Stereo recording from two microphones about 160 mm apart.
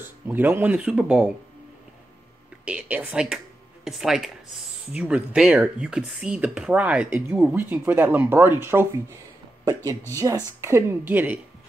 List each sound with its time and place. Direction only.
0.0 s speech: 10° right (ahead or behind)
2.6 s speech: 5° right (ahead or behind)
10.1 s speech: 20° right (ahead or behind)